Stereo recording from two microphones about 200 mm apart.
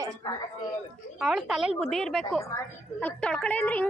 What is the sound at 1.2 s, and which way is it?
A woman's voice, centre (ahead or behind).